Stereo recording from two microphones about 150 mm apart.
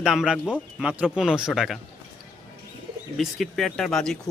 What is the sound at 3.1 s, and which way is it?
Speech, centre (ahead or behind).